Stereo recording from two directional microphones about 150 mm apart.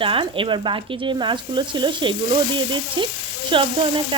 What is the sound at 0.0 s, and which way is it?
Speech, 35° right (ahead or behind).